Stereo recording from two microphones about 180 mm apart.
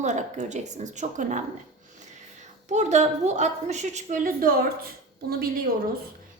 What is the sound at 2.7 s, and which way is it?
A woman's voice, 40° right (ahead or behind).